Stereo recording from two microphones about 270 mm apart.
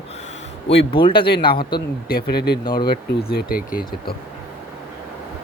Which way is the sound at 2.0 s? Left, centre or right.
Left.